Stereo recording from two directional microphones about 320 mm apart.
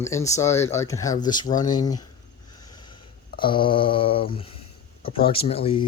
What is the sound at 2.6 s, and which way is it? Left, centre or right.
Snort, centre.